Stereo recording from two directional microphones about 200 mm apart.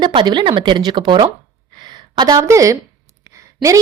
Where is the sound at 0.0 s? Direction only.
20° right (ahead or behind).